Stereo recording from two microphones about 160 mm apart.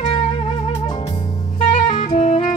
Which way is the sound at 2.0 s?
35° left (ahead or behind).